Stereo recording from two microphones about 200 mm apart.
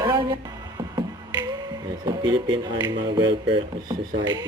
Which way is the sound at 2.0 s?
25° right (ahead or behind).